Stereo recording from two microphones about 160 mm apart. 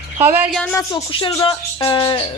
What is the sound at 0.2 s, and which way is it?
Speech, 10° right (ahead or behind).